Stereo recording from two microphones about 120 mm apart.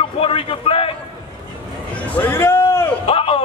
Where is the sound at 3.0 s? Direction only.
50° left (ahead or behind).